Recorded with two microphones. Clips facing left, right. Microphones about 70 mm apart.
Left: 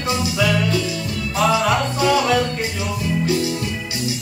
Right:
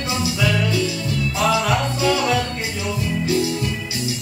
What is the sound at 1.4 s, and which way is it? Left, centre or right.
Music, centre.